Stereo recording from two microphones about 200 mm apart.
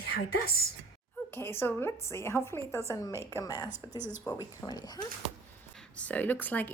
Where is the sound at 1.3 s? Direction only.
10° left (ahead or behind).